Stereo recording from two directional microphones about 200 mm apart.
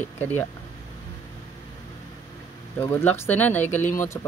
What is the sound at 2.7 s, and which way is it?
Speech, 10° left (ahead or behind).